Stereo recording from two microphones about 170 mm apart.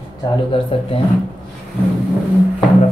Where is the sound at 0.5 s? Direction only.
30° left (ahead or behind).